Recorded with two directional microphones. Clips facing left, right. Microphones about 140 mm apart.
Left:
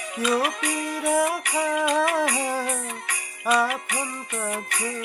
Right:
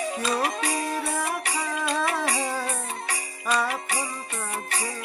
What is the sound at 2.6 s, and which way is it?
Jingle bell, 30° right (ahead or behind).